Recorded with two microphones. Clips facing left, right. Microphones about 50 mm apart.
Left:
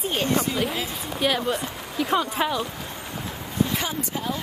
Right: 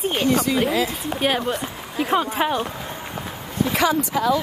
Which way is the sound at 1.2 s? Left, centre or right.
Right.